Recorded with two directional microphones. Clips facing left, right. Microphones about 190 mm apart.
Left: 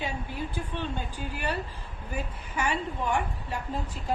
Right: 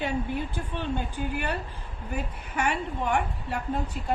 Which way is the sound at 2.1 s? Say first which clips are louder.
Right 2 dB; 60° right (ahead or behind).